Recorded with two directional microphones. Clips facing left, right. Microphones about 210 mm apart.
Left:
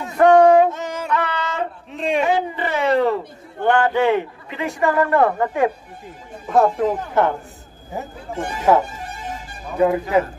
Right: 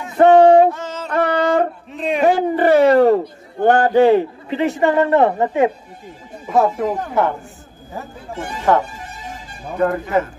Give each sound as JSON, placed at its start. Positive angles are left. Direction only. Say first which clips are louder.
{"t": 0.2, "sound": "a man's voice", "louder": "right 2 dB", "side_deg": -30}
{"t": 0.7, "sound": "carnatic music", "louder": "right 2 dB", "side_deg": 15}
{"t": 1.1, "sound": "music", "louder": "right 9 dB", "side_deg": -50}
{"t": 1.9, "sound": "speech", "louder": "even", "side_deg": 0}
{"t": 2.2, "sound": "a sound", "louder": "right 7 dB", "side_deg": -50}
{"t": 3.6, "sound": "a man's voice", "louder": "right 5 dB", "side_deg": -40}
{"t": 6.4, "sound": "speech", "louder": "even", "side_deg": -5}
{"t": 8.7, "sound": "speech", "louder": "even", "side_deg": 5}